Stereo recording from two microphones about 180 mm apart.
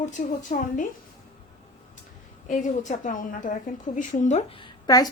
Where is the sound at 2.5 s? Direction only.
45° left (ahead or behind).